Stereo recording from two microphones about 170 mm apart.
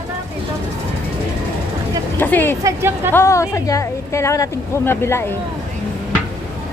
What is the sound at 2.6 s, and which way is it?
Speech, 15° right (ahead or behind).